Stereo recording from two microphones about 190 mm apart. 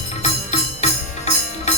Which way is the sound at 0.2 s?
35° left (ahead or behind).